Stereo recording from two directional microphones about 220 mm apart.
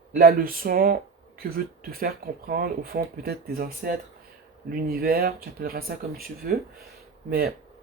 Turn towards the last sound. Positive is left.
turn(degrees=-45)  # may be behind; listen again after turning